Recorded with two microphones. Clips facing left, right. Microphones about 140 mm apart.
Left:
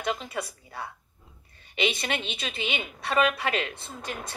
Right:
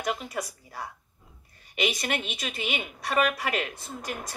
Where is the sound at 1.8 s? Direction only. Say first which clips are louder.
Even; 25° left (ahead or behind).